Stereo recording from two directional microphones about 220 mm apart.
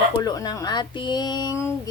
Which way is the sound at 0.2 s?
15° left (ahead or behind).